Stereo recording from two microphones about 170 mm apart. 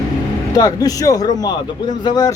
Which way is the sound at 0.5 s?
20° left (ahead or behind).